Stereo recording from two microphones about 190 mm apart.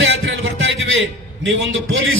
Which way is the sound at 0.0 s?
70° right (ahead or behind).